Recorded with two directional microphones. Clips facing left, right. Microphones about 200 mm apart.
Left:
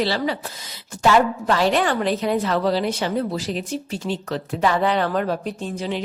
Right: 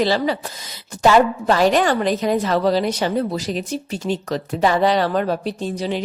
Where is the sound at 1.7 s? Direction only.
40° right (ahead or behind).